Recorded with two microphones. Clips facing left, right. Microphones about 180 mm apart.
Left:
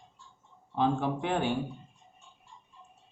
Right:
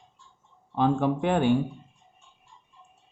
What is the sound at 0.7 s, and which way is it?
Speech, 55° right (ahead or behind).